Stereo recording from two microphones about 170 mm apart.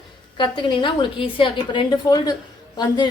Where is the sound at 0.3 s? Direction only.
25° left (ahead or behind).